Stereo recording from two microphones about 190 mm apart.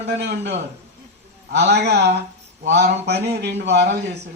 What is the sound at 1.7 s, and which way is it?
Speech, 60° right (ahead or behind).